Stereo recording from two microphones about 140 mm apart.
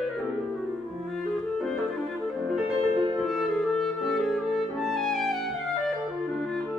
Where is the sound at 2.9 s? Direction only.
30° right (ahead or behind).